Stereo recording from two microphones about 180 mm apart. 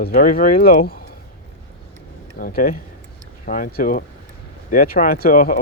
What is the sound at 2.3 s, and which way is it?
Speech, 55° left (ahead or behind).